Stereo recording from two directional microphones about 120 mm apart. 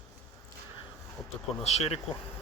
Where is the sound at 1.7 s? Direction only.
60° left (ahead or behind).